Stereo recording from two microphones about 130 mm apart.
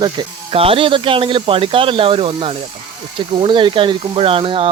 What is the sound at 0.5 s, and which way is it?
Speech, 45° right (ahead or behind).